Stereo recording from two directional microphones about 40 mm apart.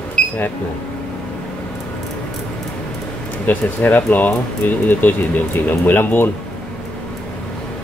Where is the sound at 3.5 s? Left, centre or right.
Left.